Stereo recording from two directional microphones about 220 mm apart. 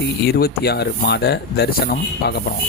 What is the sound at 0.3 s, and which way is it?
Speech, 45° left (ahead or behind).